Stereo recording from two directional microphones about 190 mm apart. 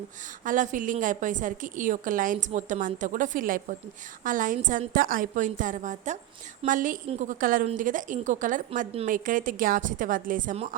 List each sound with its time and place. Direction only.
0.4 s a woman's voice: 45° right (ahead or behind)